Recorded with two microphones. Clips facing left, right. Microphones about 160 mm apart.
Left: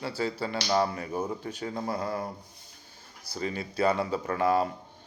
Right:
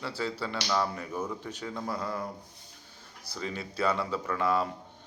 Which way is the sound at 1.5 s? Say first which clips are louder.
Left 3 dB; 55° left (ahead or behind).